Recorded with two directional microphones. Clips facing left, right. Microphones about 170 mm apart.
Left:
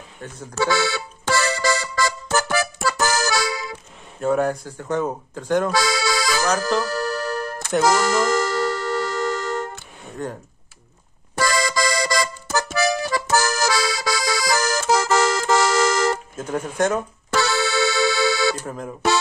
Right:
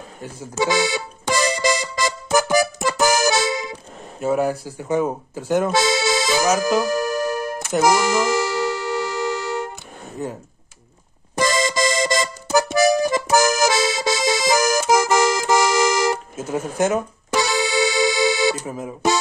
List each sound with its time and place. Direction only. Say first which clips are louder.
0.2 s music: right 1 dB; 15° right (ahead or behind)
4.2 s speech: even; 5° right (ahead or behind)
5.7 s accordion: right 3 dB; 20° right (ahead or behind)
6.4 s music: right 3 dB; 10° right (ahead or behind)
11.3 s accordion: right 2 dB; 20° right (ahead or behind)